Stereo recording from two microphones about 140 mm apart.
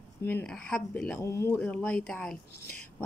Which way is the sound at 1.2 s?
20° left (ahead or behind).